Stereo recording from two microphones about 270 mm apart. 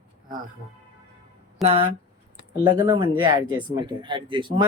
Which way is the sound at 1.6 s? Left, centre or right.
Right.